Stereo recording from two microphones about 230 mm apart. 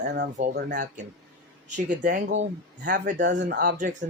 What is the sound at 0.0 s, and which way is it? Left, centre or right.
Speech, right.